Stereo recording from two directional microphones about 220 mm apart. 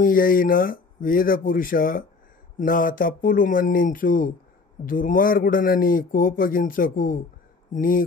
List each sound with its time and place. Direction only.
0.0 s a man's voice: 40° left (ahead or behind)